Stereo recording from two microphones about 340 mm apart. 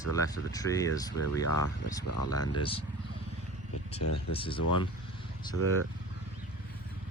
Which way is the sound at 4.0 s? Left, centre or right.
Left.